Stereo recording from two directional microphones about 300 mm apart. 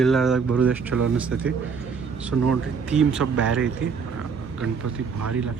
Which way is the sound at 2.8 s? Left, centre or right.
Centre.